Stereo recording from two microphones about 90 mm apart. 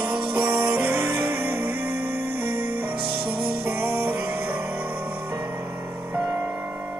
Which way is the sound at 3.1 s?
65° right (ahead or behind).